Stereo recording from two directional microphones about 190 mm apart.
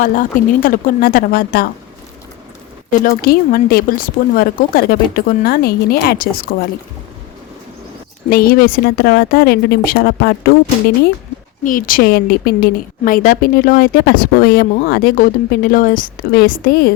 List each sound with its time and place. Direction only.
0.0 s a woman's voice: 45° left (ahead or behind)
2.9 s a woman's voice: 50° left (ahead or behind)
8.3 s a woman's voice: 50° left (ahead or behind)
11.6 s a woman's voice: 45° left (ahead or behind)